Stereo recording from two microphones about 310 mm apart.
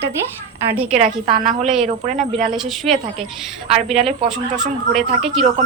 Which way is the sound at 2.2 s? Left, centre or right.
Centre.